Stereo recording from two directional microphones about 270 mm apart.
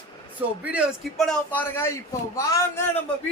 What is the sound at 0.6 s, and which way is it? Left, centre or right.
A man's voice, centre.